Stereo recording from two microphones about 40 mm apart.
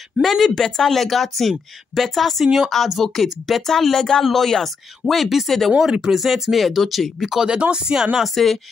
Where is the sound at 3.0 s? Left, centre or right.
Centre.